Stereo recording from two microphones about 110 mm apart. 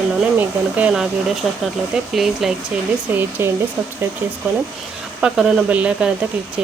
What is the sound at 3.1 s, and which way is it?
Speech, 20° right (ahead or behind).